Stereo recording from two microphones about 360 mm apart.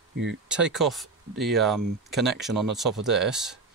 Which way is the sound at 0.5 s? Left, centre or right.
Centre.